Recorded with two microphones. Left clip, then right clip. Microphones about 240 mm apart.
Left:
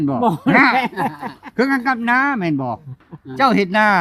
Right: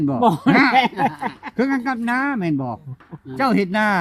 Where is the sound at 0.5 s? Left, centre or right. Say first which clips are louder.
Left 5 dB; centre.